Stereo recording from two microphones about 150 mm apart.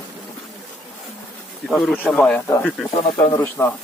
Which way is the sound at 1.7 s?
Centre (ahead or behind).